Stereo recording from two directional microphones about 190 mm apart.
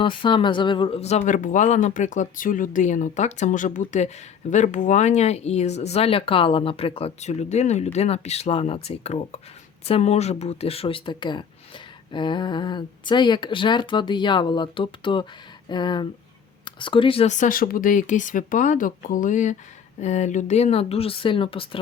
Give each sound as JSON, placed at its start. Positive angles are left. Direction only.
{"t": 0.0, "sound": "speech", "side_deg": 25}